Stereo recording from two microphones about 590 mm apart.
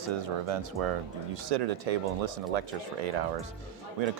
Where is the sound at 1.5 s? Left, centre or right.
Right.